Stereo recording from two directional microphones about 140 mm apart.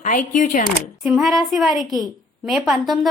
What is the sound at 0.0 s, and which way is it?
Speech, 65° left (ahead or behind).